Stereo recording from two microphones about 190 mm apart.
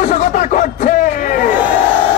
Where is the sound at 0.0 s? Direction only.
45° left (ahead or behind).